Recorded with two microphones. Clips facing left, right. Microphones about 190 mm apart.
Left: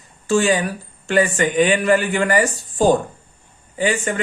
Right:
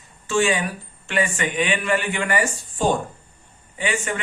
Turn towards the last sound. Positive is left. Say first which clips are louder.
# left 5 dB
turn(degrees=35)  # may be behind; listen again after turning